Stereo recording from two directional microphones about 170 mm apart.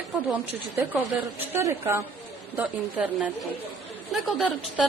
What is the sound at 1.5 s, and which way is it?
A woman's voice, 15° right (ahead or behind).